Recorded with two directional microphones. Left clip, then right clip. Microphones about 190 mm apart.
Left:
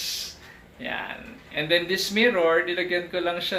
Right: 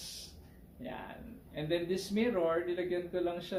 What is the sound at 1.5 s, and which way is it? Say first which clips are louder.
Speech: left 11 dB; 20° left (ahead or behind).